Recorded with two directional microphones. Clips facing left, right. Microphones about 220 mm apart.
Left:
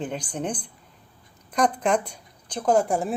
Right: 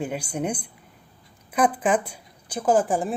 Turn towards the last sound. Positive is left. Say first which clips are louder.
# even
turn(degrees=0)  # may be behind; listen again after turning